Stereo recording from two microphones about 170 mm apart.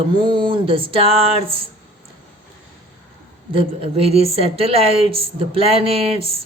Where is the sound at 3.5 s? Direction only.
35° right (ahead or behind).